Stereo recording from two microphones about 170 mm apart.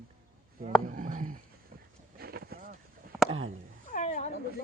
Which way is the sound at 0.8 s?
50° right (ahead or behind).